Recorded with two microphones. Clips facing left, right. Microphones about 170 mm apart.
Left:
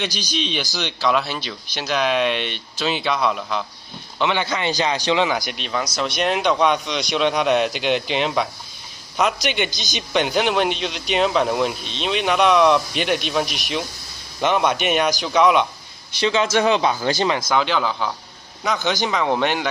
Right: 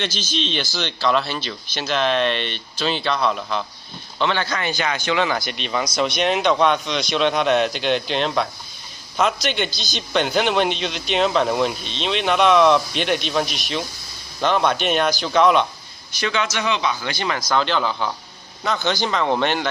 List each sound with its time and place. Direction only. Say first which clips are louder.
0.0 s speech: even; 5° left (ahead or behind)
4.7 s a man's voice: left 4 dB; 30° left (ahead or behind)
5.1 s speech: right 1 dB; 15° left (ahead or behind)
5.5 s speech: right 2 dB; 5° left (ahead or behind)
9.5 s speech: left 1 dB; 15° left (ahead or behind)
10.2 s speech: even; centre (ahead or behind)
14.7 s speech: even; 5° left (ahead or behind)
16.2 s speech: left 4 dB; 30° left (ahead or behind)
16.5 s a man's voice: left 5 dB; 40° left (ahead or behind)
17.2 s speech: right 1 dB; 20° left (ahead or behind)
17.6 s speech: even; 5° left (ahead or behind)